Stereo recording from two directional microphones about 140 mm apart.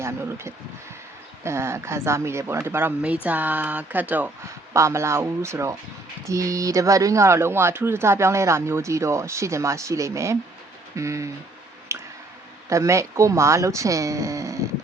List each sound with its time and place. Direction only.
0.0 s speech: 20° right (ahead or behind)
11.9 s clicking: 20° right (ahead or behind)
12.6 s speech: 20° right (ahead or behind)